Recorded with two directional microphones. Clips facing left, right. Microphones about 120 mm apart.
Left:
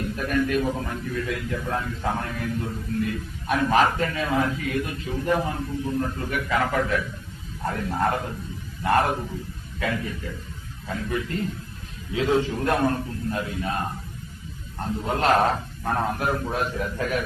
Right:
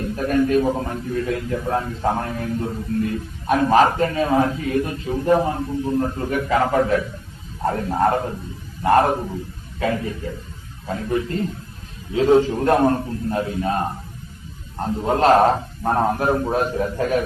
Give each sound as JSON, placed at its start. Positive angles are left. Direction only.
{"t": 0.0, "sound": "a man's voice", "side_deg": -35}